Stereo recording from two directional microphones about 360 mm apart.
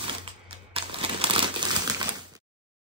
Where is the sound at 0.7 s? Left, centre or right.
Centre.